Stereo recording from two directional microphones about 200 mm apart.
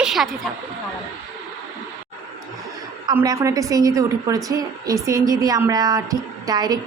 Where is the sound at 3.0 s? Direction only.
20° right (ahead or behind).